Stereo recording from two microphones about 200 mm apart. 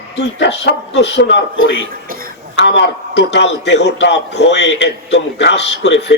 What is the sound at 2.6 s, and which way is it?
A man's voice, 60° left (ahead or behind).